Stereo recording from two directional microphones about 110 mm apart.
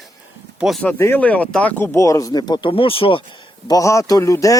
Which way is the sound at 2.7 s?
55° left (ahead or behind).